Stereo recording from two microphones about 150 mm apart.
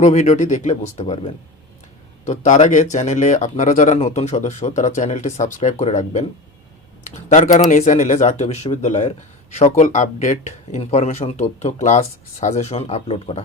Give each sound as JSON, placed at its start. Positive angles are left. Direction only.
{"t": 0.0, "sound": "speech", "side_deg": 55}